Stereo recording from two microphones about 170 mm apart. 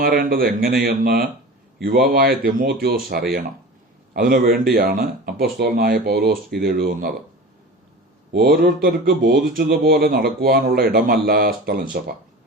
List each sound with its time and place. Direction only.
0.0 s speech: 55° right (ahead or behind)
8.3 s speech: 65° right (ahead or behind)